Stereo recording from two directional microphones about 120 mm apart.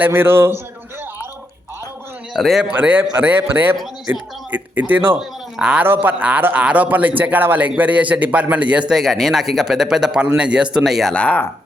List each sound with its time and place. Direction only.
0.0 s a man's voice: 20° right (ahead or behind)
2.3 s speech: centre (ahead or behind)
2.7 s speech: 15° right (ahead or behind)
8.9 s speech: centre (ahead or behind)
11.1 s speech: 10° left (ahead or behind)